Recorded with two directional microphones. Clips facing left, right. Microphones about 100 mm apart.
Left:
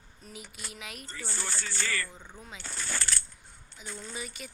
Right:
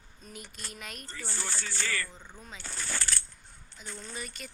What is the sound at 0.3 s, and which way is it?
Speech, 5° left (ahead or behind).